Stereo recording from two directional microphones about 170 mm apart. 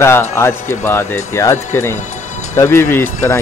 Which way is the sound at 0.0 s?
15° left (ahead or behind).